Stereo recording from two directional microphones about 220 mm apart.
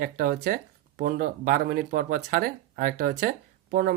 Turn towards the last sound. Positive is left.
turn(degrees=-40)  # may be behind; listen again after turning